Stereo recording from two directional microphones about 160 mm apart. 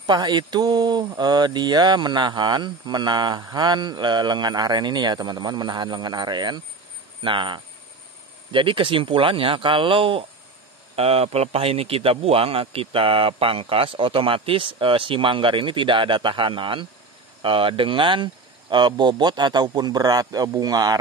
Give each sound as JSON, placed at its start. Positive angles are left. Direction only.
{"t": 0.0, "sound": "speech", "side_deg": -30}